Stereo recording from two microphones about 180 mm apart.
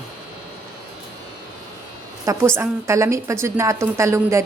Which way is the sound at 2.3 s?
15° right (ahead or behind).